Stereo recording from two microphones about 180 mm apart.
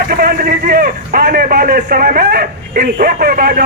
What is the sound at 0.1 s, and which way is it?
A man's voice, 55° right (ahead or behind).